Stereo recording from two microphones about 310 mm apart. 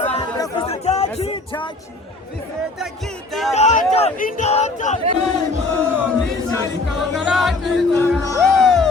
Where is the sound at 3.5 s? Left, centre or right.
Left.